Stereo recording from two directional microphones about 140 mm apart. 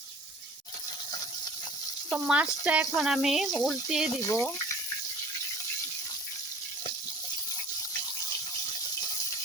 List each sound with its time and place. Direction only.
2.0 s speech: 5° right (ahead or behind)
4.1 s speech: 25° left (ahead or behind)